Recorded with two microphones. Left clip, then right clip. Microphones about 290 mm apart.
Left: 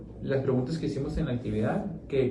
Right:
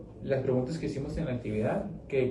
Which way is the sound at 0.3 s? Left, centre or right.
Centre.